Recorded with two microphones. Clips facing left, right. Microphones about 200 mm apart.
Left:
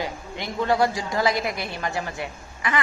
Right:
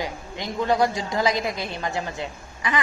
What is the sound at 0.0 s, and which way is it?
A woman's voice, 15° right (ahead or behind).